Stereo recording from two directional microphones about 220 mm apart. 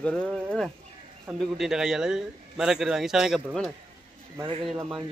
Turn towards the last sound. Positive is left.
turn(degrees=0)  # may be behind; listen again after turning